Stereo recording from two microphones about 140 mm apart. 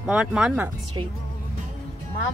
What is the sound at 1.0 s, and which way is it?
Music, 35° right (ahead or behind).